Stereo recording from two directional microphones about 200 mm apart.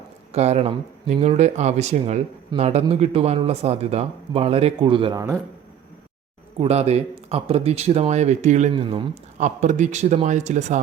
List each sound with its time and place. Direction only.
0.3 s speech: 30° right (ahead or behind); by 5.4 s 15° right (ahead or behind)
6.6 s speech: 30° right (ahead or behind)
8.7 s speech: 25° right (ahead or behind)
9.4 s speech: 35° right (ahead or behind)